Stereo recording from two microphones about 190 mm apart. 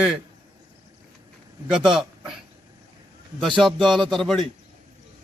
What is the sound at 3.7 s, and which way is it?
Speech, centre (ahead or behind).